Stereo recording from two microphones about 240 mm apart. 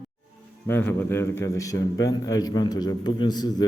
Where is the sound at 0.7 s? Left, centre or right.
Centre.